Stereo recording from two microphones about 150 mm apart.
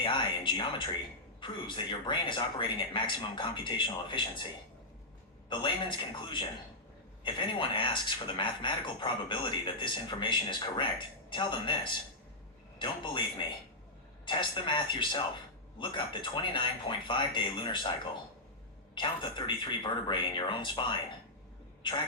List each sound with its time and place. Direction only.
0.0 s speech: 35° left (ahead or behind)
5.5 s speech: 30° left (ahead or behind)
14.3 s speech: 35° left (ahead or behind)
21.8 s speech: 35° left (ahead or behind)